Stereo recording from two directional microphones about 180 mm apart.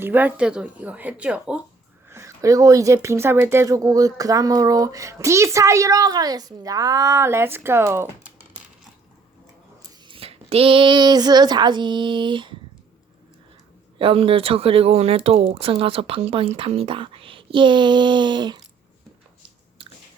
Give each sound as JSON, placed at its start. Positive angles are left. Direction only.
{"t": 0.0, "sound": "speech", "side_deg": -10}
{"t": 10.1, "sound": "a woman's voice", "side_deg": -30}
{"t": 14.0, "sound": "a woman's voice", "side_deg": -30}